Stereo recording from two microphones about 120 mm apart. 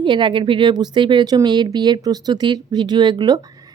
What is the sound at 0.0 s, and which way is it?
A woman's voice, 40° right (ahead or behind).